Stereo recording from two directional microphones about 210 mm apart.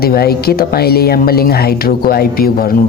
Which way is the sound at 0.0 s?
45° left (ahead or behind).